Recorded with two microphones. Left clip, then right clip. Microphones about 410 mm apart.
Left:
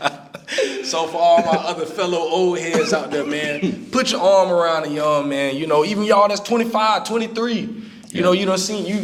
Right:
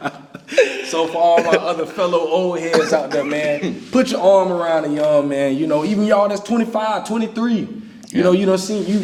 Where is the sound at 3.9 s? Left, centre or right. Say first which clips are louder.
Right 2 dB; left.